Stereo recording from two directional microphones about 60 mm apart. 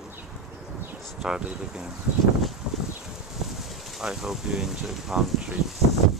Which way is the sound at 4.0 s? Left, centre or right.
Centre.